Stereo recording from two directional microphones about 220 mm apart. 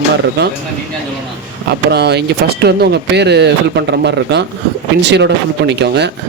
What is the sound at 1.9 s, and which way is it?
Speech, 50° right (ahead or behind).